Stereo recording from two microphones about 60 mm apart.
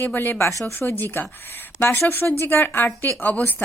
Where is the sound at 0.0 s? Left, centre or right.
Left.